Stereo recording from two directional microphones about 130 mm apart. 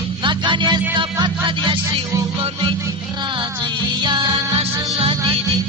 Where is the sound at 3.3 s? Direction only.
35° right (ahead or behind).